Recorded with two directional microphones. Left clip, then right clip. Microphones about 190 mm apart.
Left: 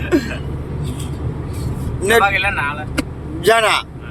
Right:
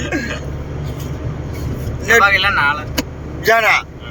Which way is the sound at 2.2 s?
5° left (ahead or behind).